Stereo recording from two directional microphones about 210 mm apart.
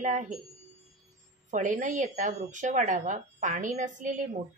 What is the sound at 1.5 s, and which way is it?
Speech, 35° right (ahead or behind).